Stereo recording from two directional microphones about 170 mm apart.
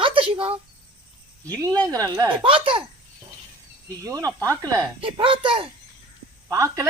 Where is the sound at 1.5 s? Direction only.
20° right (ahead or behind).